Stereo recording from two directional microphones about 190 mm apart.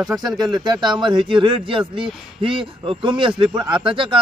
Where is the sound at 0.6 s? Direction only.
20° right (ahead or behind).